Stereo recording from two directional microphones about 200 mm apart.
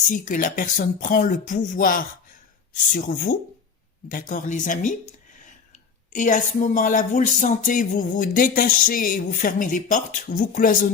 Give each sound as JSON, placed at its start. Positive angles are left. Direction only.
{"t": 0.1, "sound": "speech", "side_deg": 45}
{"t": 6.1, "sound": "speech", "side_deg": 40}